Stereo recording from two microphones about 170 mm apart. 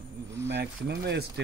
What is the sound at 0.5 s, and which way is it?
Speech, 80° right.